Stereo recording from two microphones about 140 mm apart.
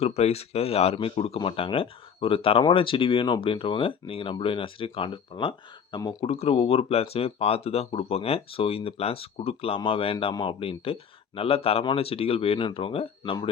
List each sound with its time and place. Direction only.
0.0 s speech: 50° left (ahead or behind)
6.0 s speech: 25° left (ahead or behind)
6.2 s speech: 45° left (ahead or behind)